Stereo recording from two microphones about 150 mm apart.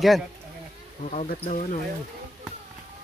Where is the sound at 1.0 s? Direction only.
55° left (ahead or behind).